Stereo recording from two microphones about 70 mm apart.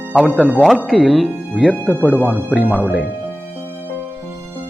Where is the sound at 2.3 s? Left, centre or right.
Right.